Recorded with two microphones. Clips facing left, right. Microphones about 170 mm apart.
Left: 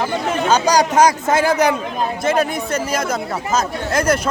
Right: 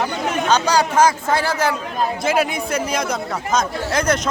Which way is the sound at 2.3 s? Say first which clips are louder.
Left 3 dB; centre (ahead or behind).